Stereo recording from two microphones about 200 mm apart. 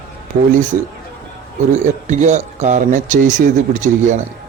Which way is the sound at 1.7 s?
35° right (ahead or behind).